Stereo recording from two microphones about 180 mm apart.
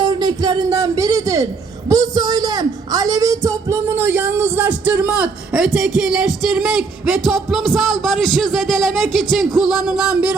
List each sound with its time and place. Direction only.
0.0 s music: 25° right (ahead or behind)
1.9 s a man's voice: 20° right (ahead or behind); by 10.2 s 5° right (ahead or behind)